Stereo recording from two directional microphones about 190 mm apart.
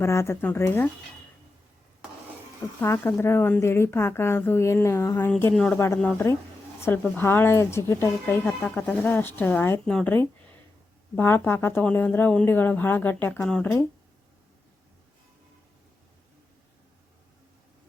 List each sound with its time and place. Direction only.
0.0 s speech: 15° left (ahead or behind)
2.8 s speech: 10° left (ahead or behind)